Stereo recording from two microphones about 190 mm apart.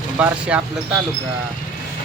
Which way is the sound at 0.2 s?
5° right (ahead or behind).